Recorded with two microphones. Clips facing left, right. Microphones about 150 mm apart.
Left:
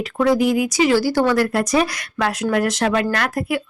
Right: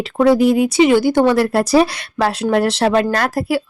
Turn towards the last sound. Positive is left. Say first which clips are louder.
# right 4 dB
turn(degrees=-35)  # may be behind; listen again after turning